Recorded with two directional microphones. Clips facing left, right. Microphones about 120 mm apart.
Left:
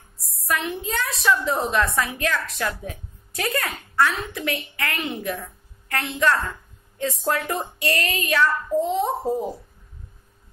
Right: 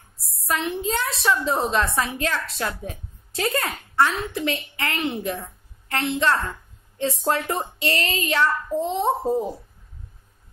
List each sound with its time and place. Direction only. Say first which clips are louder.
0.4 s a woman's voice: right 1 dB; 30° right (ahead or behind)